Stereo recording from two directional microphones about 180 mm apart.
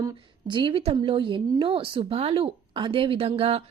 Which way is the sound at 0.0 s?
25° right (ahead or behind).